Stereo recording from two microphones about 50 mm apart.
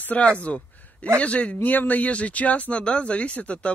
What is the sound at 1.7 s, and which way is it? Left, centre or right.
Speech, left.